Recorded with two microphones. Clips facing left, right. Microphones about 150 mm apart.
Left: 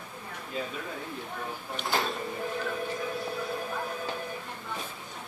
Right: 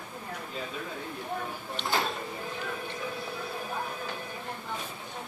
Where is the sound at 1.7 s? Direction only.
Centre (ahead or behind).